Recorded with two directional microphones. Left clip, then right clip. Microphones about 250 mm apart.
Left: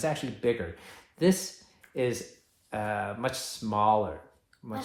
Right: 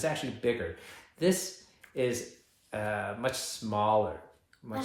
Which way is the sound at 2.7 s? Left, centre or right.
Left.